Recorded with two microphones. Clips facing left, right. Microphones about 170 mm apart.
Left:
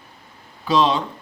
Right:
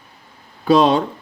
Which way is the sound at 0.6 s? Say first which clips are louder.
Right 5 dB; 50° right (ahead or behind).